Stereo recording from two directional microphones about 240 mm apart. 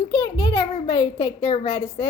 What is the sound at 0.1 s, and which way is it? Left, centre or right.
A child's voice, centre.